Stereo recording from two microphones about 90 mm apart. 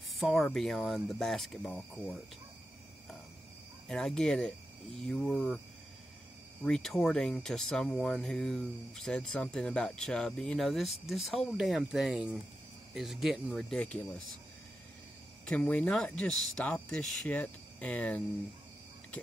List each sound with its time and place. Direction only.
0.2 s speech: 5° left (ahead or behind)
3.9 s speech: 5° left (ahead or behind)
6.6 s speech: 5° left (ahead or behind)
15.4 s speech: 15° left (ahead or behind)